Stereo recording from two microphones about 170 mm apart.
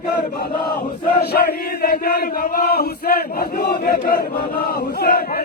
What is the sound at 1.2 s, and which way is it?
Chant, 65° left (ahead or behind).